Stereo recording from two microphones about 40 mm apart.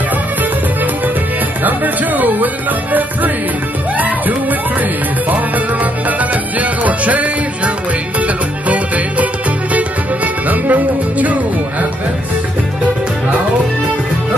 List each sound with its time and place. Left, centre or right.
1.6 s music: right
6.0 s music: right